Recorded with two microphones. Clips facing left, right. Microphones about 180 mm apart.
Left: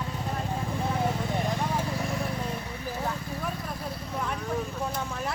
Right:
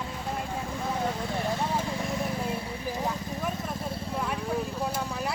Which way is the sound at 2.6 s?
15° right (ahead or behind).